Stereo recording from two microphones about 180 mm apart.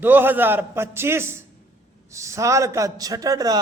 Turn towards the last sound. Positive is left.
turn(degrees=-20)  # may be behind; listen again after turning